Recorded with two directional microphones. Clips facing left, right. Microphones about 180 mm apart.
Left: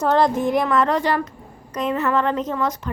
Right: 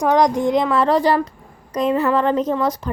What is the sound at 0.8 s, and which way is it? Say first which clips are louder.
Speech: right 3 dB; 35° right (ahead or behind).